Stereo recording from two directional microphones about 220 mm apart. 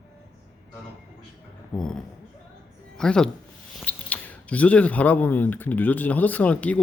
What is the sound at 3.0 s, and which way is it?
Speech, 5° left (ahead or behind).